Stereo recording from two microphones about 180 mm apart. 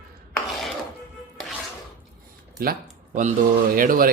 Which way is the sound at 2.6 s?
55° right (ahead or behind).